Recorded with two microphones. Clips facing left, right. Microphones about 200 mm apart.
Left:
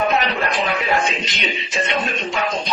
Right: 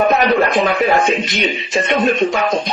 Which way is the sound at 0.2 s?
55° right (ahead or behind).